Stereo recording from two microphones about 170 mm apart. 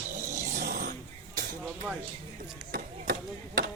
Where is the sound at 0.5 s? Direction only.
60° right (ahead or behind).